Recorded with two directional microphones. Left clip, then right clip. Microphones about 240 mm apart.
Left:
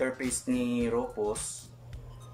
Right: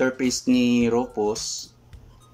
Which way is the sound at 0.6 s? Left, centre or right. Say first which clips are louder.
Right 7 dB; right.